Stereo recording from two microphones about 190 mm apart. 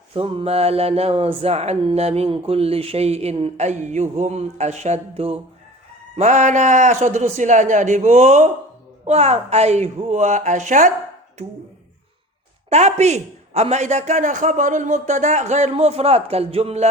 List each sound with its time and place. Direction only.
0.1 s speech: 30° right (ahead or behind)
12.7 s speech: 35° right (ahead or behind)